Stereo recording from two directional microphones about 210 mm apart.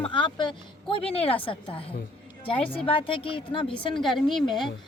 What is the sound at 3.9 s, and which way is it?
Speech, centre (ahead or behind).